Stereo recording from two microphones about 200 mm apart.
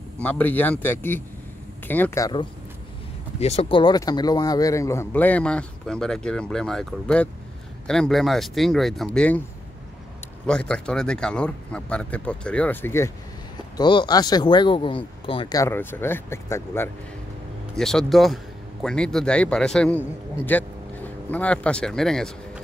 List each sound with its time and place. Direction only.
0.2 s a man's voice: 10° left (ahead or behind)
3.3 s a man's voice: 30° left (ahead or behind); by 9.4 s 5° left (ahead or behind)
10.4 s speech: 5° left (ahead or behind)
13.7 s speech: 20° left (ahead or behind)
17.7 s speech: centre (ahead or behind)